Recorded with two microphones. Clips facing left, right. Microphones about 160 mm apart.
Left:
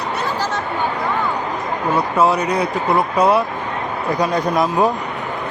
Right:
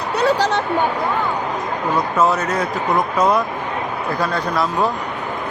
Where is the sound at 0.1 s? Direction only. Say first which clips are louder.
Right 7 dB; 70° right (ahead or behind).